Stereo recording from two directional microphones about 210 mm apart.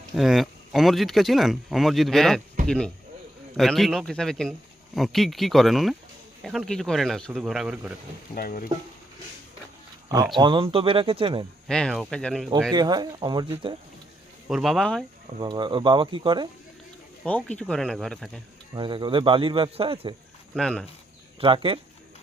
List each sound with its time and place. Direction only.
0.2 s speech: centre (ahead or behind)
8.4 s speech: 45° left (ahead or behind)
10.3 s a man's voice: 20° right (ahead or behind)
11.7 s speech: 5° left (ahead or behind)
12.7 s a man's voice: 20° right (ahead or behind)
14.4 s speech: centre (ahead or behind)
15.4 s a man's voice: 20° right (ahead or behind)
17.6 s speech: 5° left (ahead or behind)
18.7 s a man's voice: 20° right (ahead or behind)
20.6 s speech: 5° left (ahead or behind)
21.4 s a man's voice: 25° right (ahead or behind)